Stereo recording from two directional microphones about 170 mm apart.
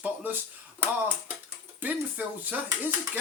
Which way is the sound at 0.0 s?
10° right (ahead or behind).